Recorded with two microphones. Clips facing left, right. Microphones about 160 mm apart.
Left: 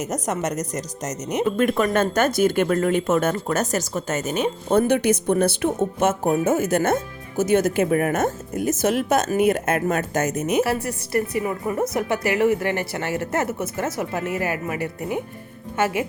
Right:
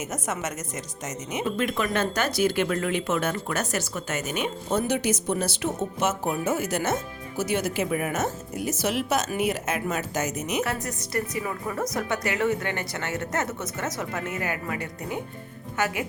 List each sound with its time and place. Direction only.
0.1 s speech: 40° left (ahead or behind)
1.5 s speech: 50° left (ahead or behind)
4.7 s speech: 55° left (ahead or behind)
10.6 s speech: 30° left (ahead or behind)
15.8 s speech: 25° left (ahead or behind)